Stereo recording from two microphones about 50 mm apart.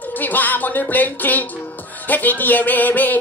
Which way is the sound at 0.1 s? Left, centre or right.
Left.